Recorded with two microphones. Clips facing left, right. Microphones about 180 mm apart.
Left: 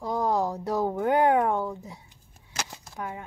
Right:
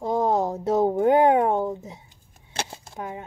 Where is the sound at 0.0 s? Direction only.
25° right (ahead or behind).